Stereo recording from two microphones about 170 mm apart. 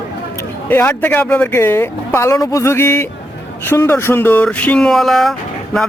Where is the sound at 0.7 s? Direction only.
15° left (ahead or behind).